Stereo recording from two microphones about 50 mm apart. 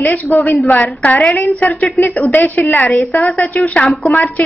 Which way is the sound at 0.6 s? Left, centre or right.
Left.